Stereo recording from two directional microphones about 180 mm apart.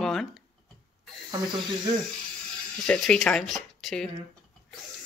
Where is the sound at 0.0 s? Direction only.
Centre (ahead or behind).